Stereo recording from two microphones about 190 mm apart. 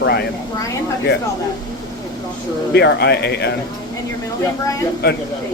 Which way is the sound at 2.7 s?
60° left (ahead or behind).